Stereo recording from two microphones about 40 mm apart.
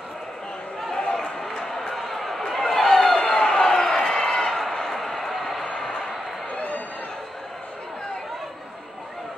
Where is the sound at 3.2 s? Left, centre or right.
Centre.